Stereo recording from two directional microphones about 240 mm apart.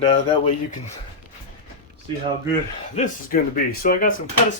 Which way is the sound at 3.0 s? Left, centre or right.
Left.